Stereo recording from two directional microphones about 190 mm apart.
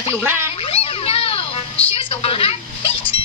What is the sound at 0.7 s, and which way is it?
Children playing, 30° left (ahead or behind).